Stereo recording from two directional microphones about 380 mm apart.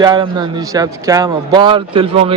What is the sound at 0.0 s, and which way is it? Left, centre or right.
A man's voice, centre.